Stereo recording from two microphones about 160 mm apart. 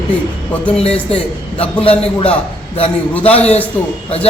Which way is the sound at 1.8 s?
35° left (ahead or behind).